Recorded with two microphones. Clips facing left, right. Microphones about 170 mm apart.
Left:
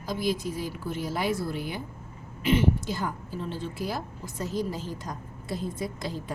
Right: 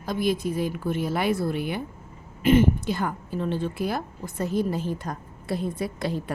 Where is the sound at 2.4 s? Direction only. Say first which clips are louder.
Right 5 dB; 50° right (ahead or behind).